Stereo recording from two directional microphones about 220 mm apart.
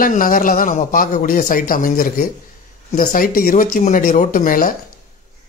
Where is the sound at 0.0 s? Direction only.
40° left (ahead or behind).